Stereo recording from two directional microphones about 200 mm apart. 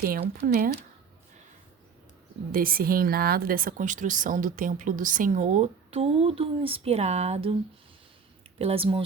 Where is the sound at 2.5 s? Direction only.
45° right (ahead or behind); by 7.6 s 30° right (ahead or behind).